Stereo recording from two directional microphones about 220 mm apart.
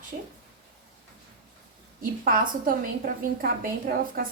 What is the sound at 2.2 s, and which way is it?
Speech, 40° right (ahead or behind).